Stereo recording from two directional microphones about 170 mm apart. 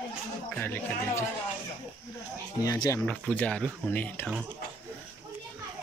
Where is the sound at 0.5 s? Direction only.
10° left (ahead or behind).